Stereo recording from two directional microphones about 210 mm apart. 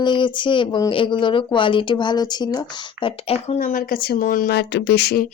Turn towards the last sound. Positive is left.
turn(degrees=50)  # may be behind; listen again after turning